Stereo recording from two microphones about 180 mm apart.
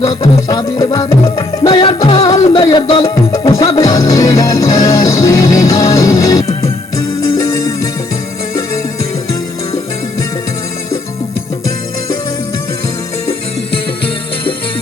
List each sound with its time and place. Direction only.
0.0 s music: 20° left (ahead or behind)